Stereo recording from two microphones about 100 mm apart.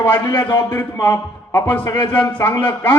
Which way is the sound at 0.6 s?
20° left (ahead or behind).